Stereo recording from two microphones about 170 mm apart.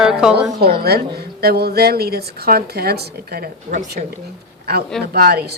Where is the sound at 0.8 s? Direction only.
70° right (ahead or behind).